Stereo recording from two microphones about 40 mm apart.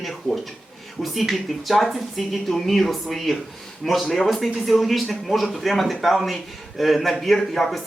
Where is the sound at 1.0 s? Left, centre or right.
Centre.